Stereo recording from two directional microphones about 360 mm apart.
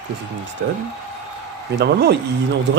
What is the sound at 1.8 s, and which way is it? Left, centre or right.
Speech, right.